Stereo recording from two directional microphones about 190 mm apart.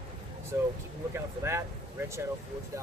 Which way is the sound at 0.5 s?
15° right (ahead or behind).